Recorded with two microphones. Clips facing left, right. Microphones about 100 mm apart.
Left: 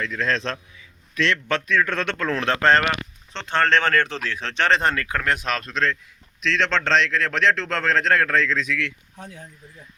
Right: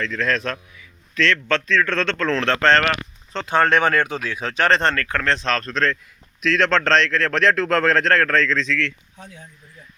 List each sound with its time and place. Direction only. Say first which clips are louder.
0.0 s a man's voice: right 2 dB; 20° left (ahead or behind)
3.3 s speech: right 3 dB; 10° right (ahead or behind)
4.8 s a man's voice: right 2 dB; 10° left (ahead or behind)